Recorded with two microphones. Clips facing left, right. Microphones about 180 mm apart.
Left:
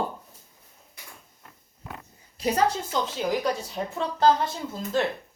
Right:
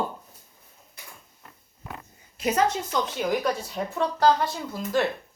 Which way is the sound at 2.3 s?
35° left (ahead or behind).